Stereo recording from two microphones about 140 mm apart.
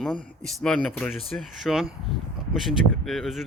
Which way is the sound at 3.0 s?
Centre (ahead or behind).